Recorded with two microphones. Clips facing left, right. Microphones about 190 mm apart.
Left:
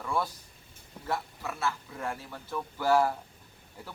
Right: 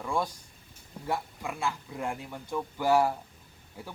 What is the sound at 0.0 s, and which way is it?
Speech, 15° right (ahead or behind).